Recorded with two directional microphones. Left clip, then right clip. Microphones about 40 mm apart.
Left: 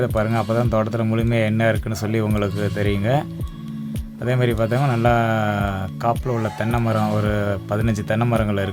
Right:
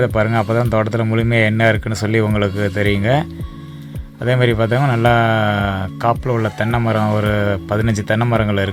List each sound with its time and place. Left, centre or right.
0.3 s speech: centre
4.2 s music: right
4.8 s speech: centre
5.0 s music: right
6.2 s speech: centre
6.6 s speech: centre